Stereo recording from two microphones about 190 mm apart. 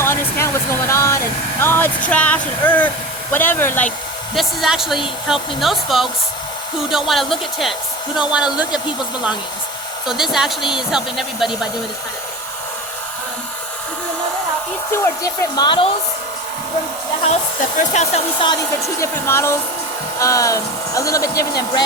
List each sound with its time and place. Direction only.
0.0 s a sound: 15° left (ahead or behind)
3.3 s speech: 10° left (ahead or behind)
4.4 s speech: centre (ahead or behind)
10.1 s speech: centre (ahead or behind)
14.9 s speech: 15° left (ahead or behind)
17.7 s speech: 35° left (ahead or behind)
18.4 s speech: 15° left (ahead or behind)